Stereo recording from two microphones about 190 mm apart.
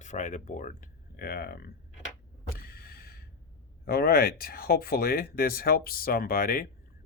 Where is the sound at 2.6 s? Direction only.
50° left (ahead or behind).